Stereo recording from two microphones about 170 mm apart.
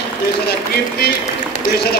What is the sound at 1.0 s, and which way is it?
Speech, 70° left (ahead or behind).